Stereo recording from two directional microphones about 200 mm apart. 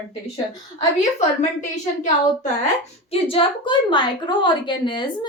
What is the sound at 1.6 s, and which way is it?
Speech, 35° left (ahead or behind).